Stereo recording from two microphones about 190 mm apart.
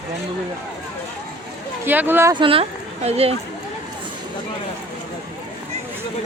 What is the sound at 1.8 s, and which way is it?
Speech, 10° right (ahead or behind).